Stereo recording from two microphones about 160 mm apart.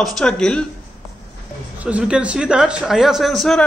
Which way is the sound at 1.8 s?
10° right (ahead or behind).